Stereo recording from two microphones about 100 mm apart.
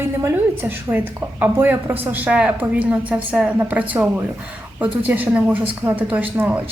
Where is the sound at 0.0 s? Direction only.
20° right (ahead or behind).